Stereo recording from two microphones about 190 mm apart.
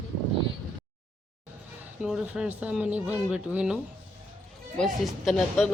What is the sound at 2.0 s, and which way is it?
Speech, 5° right (ahead or behind).